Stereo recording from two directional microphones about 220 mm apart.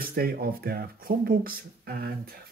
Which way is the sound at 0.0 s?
45° right (ahead or behind).